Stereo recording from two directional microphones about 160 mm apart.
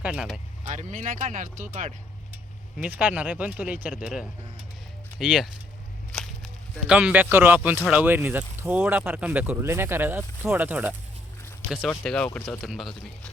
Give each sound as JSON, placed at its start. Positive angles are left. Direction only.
{"t": 0.0, "sound": "speech", "side_deg": -5}
{"t": 0.6, "sound": "speech", "side_deg": -50}
{"t": 2.3, "sound": "speech", "side_deg": -10}
{"t": 6.1, "sound": "whip", "side_deg": 5}
{"t": 6.8, "sound": "speech", "side_deg": -5}
{"t": 11.9, "sound": "speech", "side_deg": 5}